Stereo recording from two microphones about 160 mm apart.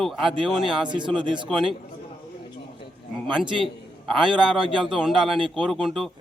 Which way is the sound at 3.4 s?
30° right (ahead or behind).